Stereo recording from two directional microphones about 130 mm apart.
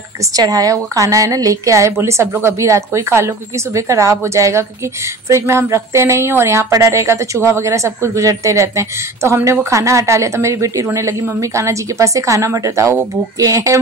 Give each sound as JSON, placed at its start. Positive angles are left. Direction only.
{"t": 0.4, "sound": "a woman's voice", "side_deg": -30}